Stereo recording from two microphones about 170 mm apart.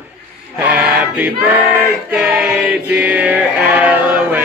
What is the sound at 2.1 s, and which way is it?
Chant, 5° right (ahead or behind).